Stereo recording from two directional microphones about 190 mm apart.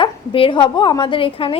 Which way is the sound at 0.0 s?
25° left (ahead or behind).